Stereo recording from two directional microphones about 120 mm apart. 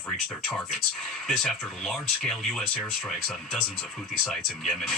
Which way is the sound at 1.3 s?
Centre (ahead or behind).